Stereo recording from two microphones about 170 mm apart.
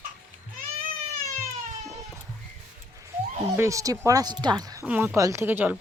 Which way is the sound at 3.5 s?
15° right (ahead or behind).